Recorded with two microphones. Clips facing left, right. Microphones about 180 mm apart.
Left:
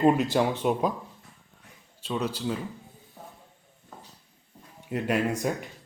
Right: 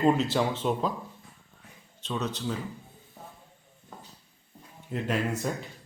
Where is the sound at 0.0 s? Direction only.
15° left (ahead or behind).